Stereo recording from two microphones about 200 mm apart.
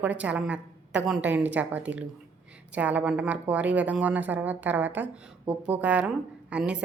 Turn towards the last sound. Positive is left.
turn(degrees=-5)  # may be behind; listen again after turning